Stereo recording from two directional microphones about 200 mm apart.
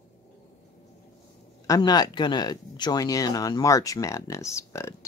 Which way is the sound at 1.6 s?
20° left (ahead or behind).